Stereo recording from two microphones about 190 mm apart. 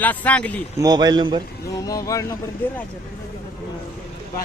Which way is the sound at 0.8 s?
20° right (ahead or behind).